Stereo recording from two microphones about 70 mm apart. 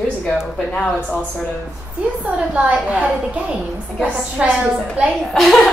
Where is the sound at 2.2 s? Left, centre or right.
Centre.